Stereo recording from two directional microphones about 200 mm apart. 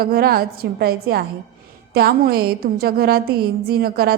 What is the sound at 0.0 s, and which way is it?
Speech, 50° right (ahead or behind).